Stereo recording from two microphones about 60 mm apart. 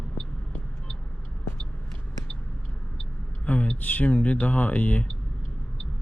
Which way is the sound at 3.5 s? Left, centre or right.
Left.